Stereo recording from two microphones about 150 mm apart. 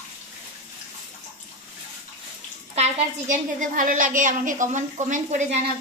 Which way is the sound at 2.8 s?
55° right (ahead or behind).